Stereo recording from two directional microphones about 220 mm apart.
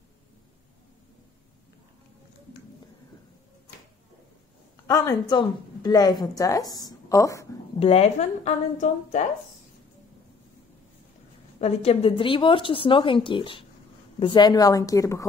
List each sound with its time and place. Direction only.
4.8 s a woman's voice: 15° left (ahead or behind)
7.8 s speech: 30° left (ahead or behind)
11.6 s a woman's voice: 25° left (ahead or behind)